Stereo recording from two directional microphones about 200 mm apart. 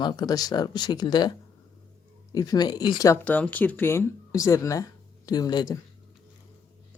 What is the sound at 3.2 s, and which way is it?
Speech, 5° left (ahead or behind).